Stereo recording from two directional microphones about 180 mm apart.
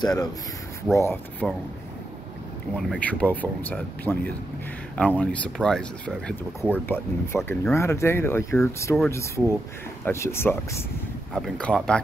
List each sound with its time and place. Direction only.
0.0 s speech: 20° left (ahead or behind)
2.7 s speech: 5° left (ahead or behind)
10.0 s speech: 15° left (ahead or behind)